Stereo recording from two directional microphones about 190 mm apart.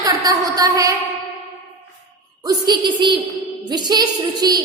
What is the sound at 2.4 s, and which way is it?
A woman's voice, 20° right (ahead or behind).